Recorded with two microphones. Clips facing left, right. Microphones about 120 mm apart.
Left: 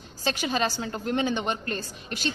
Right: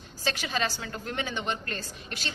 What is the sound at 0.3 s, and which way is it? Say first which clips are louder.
A woman's voice: left 4 dB; 20° left (ahead or behind).